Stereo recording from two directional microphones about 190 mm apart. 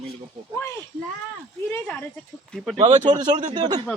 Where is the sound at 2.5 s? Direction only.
Centre (ahead or behind).